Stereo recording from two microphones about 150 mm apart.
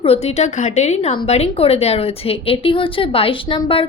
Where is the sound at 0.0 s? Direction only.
40° left (ahead or behind).